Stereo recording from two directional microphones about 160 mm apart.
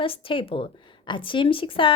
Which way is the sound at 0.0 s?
35° left (ahead or behind).